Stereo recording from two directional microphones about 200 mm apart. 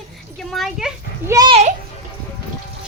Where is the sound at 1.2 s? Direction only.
20° right (ahead or behind).